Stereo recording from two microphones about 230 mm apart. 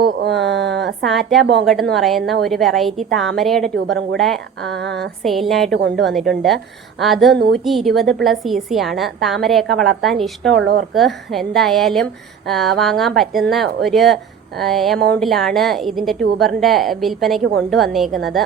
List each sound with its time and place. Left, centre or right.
0.0 s a sound: right
1.0 s a woman's voice: centre
4.8 s speech: right
5.2 s a woman's voice: centre